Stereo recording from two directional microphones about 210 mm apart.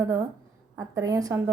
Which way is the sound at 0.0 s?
15° right (ahead or behind).